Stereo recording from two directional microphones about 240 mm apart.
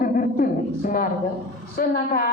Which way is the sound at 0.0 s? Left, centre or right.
Left.